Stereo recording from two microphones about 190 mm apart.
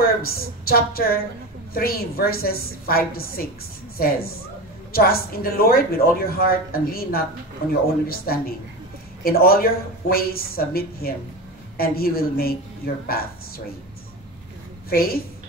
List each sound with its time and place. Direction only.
0.0 s a woman's voice: 55° left (ahead or behind)
14.9 s speech: 50° left (ahead or behind)